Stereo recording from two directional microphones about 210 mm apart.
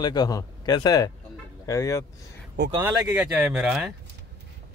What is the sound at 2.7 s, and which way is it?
Speech, 10° right (ahead or behind).